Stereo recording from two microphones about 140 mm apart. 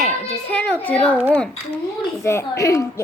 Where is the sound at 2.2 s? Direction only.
20° left (ahead or behind).